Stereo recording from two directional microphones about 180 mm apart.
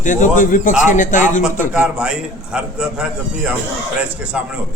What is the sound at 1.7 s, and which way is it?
A man's voice, 5° right (ahead or behind).